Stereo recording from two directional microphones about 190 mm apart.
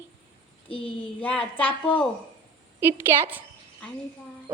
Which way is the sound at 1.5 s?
10° left (ahead or behind).